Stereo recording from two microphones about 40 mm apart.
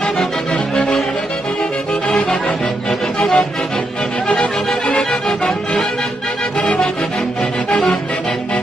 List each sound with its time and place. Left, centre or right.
0.7 s music: centre
2.9 s music: centre
4.8 s music: left
7.7 s music: centre